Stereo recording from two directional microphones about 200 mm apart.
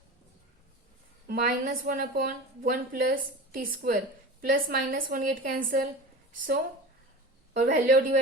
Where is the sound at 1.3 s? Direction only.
45° right (ahead or behind).